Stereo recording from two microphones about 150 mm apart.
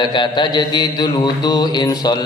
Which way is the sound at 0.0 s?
30° left (ahead or behind).